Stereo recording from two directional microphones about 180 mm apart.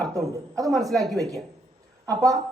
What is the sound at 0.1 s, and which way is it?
Speech, 20° right (ahead or behind).